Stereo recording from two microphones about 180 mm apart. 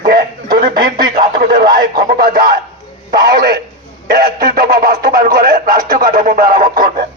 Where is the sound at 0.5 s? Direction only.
55° right (ahead or behind).